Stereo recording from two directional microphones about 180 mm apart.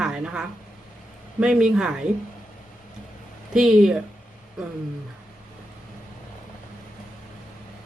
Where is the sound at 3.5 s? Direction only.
Centre (ahead or behind).